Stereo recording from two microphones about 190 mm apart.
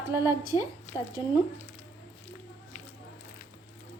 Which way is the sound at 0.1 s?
15° right (ahead or behind).